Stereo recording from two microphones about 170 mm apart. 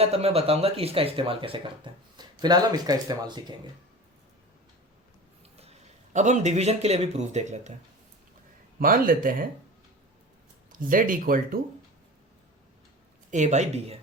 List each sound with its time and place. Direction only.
0.0 s speech: 35° right (ahead or behind)
6.1 s speech: 45° right (ahead or behind)
8.8 s speech: 55° right (ahead or behind)
10.7 s speech: 55° right (ahead or behind)
13.3 s speech: 45° right (ahead or behind)